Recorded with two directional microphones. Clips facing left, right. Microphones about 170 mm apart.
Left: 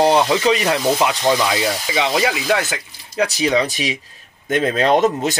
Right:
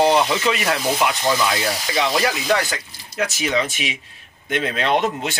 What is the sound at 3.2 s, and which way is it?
Speech, 35° left (ahead or behind).